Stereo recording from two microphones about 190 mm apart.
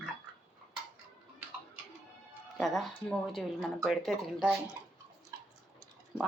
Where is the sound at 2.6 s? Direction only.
Centre (ahead or behind).